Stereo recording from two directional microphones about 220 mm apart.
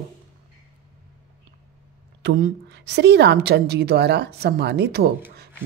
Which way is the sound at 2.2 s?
50° right (ahead or behind).